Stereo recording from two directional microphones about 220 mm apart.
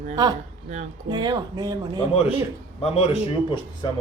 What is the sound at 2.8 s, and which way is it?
A man's voice, 25° left (ahead or behind).